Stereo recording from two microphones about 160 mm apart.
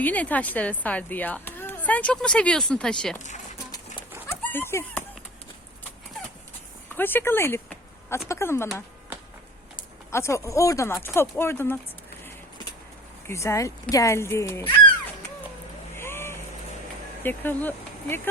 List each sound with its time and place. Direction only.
0.0 s a child's voice: 10° left (ahead or behind)
4.3 s a sound: 15° left (ahead or behind)
6.9 s a child's voice: 10° left (ahead or behind)
10.1 s a child's voice: 15° left (ahead or behind)
13.2 s a child's voice: 15° left (ahead or behind)
16.0 s vehicle: 15° left (ahead or behind)
17.2 s speech: 10° left (ahead or behind)